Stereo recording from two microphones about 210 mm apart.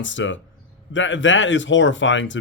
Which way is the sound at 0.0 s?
60° left (ahead or behind).